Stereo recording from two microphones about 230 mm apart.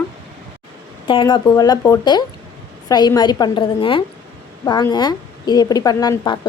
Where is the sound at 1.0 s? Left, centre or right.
Left.